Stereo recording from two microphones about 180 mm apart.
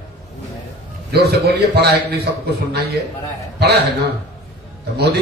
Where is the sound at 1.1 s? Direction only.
65° right (ahead or behind).